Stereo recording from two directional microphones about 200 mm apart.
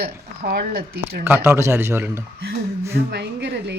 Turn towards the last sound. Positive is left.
turn(degrees=-60)  # may be behind; listen again after turning